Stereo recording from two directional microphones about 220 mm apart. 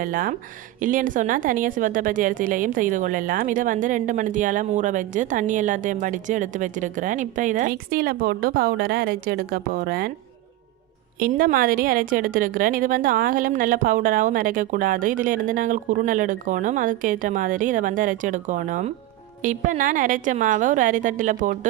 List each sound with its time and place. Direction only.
0.0 s a woman's voice: 40° right (ahead or behind)
11.2 s a woman's voice: 40° right (ahead or behind)